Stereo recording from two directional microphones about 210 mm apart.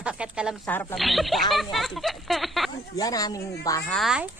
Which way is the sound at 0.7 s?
10° left (ahead or behind).